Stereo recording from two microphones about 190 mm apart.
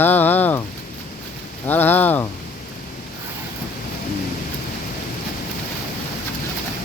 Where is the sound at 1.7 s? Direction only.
10° left (ahead or behind).